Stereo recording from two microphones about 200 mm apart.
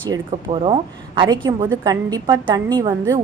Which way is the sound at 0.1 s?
25° right (ahead or behind).